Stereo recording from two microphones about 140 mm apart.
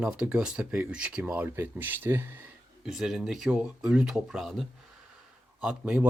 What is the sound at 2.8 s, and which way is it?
Speech, 5° right (ahead or behind).